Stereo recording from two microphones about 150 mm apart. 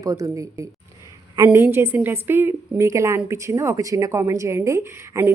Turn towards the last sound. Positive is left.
turn(degrees=-15)  # may be behind; listen again after turning